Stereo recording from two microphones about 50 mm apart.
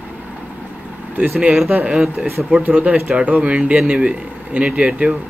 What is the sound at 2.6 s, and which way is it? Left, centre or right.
Speech, right.